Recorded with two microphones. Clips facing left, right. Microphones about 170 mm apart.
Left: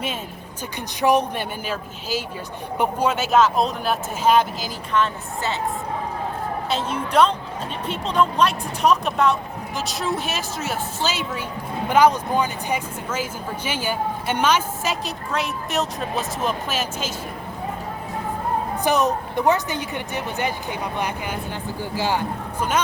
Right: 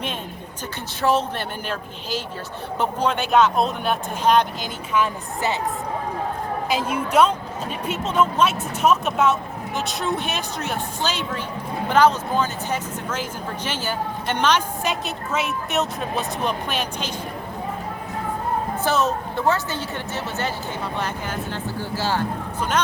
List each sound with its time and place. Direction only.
1.0 s speech: 15° left (ahead or behind)
4.9 s a woman's voice: 20° right (ahead or behind)
6.7 s a woman's voice: 10° right (ahead or behind)
18.8 s speech: 15° left (ahead or behind)